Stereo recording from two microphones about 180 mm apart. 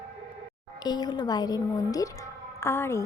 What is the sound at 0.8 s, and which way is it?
A man's voice, 20° left (ahead or behind).